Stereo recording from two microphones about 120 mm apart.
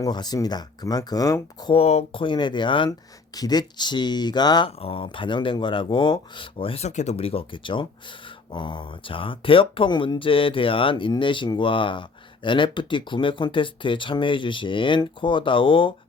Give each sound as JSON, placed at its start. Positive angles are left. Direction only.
{"t": 0.0, "sound": "speech", "side_deg": 35}
{"t": 1.7, "sound": "speech", "side_deg": 60}
{"t": 2.1, "sound": "speech", "side_deg": 40}
{"t": 4.8, "sound": "speech", "side_deg": 50}
{"t": 6.8, "sound": "speech", "side_deg": 70}